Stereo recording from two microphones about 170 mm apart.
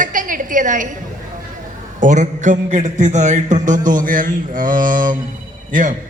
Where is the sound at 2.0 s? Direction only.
45° right (ahead or behind).